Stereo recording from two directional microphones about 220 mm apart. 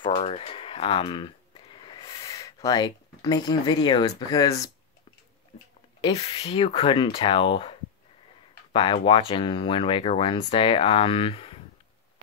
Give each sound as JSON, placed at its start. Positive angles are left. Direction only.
{"t": 0.1, "sound": "speech", "side_deg": 30}
{"t": 5.9, "sound": "speech", "side_deg": 25}
{"t": 8.7, "sound": "speech", "side_deg": 20}